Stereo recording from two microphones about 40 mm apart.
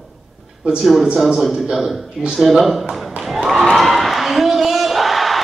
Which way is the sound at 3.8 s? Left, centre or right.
Centre.